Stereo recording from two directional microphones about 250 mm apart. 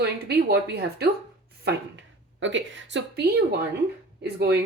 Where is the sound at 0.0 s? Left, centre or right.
Right.